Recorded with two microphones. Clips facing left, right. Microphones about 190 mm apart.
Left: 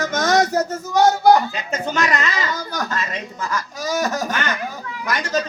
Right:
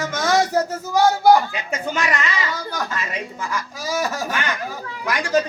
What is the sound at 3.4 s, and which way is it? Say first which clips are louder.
Speech: left 2 dB; 5° right (ahead or behind).